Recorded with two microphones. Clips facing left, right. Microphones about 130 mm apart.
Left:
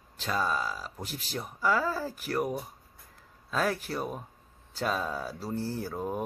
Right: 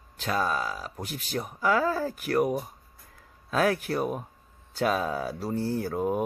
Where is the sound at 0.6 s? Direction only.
50° right (ahead or behind).